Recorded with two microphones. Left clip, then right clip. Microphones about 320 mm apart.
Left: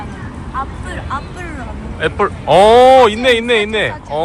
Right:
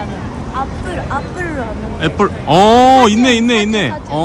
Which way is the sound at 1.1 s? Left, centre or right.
Centre.